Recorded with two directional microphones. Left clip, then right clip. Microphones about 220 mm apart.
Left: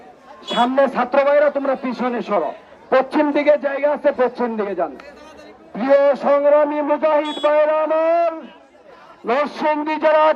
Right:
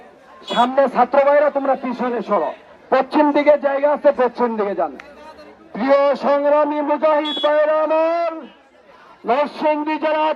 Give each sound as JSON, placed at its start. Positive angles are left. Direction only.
{"t": 0.4, "sound": "a man's voice", "side_deg": -15}
{"t": 2.9, "sound": "speech", "side_deg": -20}
{"t": 9.2, "sound": "a man's voice", "side_deg": 0}